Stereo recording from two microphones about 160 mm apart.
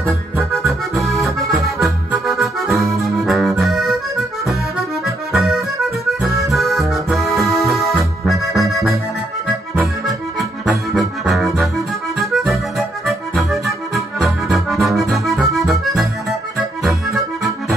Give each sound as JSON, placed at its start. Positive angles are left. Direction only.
{"t": 0.5, "sound": "accordion", "side_deg": 0}
{"t": 10.6, "sound": "music", "side_deg": 0}
{"t": 16.8, "sound": "accordion", "side_deg": 0}